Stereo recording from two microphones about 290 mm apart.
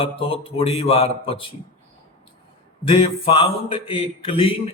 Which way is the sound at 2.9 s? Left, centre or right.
Centre.